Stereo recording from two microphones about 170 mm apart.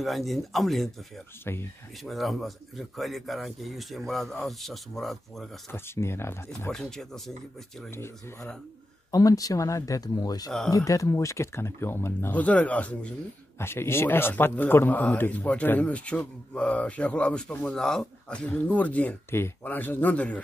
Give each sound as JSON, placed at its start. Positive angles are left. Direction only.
{"t": 0.0, "sound": "speech", "side_deg": 0}
{"t": 1.4, "sound": "a man's voice", "side_deg": 15}
{"t": 2.0, "sound": "speech", "side_deg": 0}
{"t": 5.7, "sound": "a man's voice", "side_deg": 15}
{"t": 6.7, "sound": "speech", "side_deg": 0}
{"t": 7.9, "sound": "a man's voice", "side_deg": 15}